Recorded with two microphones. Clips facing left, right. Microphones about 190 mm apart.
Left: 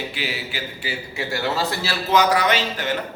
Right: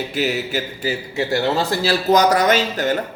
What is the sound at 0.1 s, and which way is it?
A man's voice, 45° right (ahead or behind).